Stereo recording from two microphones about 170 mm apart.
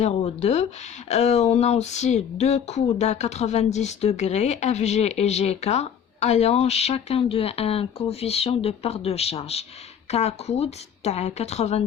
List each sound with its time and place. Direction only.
0.0 s speech: 40° left (ahead or behind)